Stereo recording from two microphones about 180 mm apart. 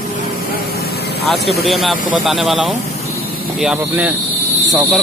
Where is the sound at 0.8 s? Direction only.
65° left (ahead or behind).